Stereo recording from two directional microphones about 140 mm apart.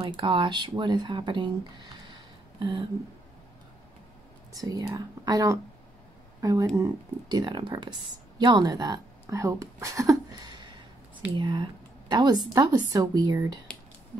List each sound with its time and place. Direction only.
0.0 s speech: 35° right (ahead or behind)
4.6 s speech: 25° right (ahead or behind)
11.3 s speech: 35° right (ahead or behind)